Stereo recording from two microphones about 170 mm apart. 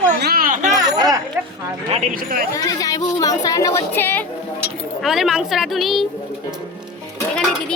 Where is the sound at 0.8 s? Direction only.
20° right (ahead or behind).